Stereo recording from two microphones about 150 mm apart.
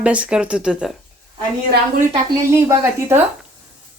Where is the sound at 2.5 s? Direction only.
15° right (ahead or behind).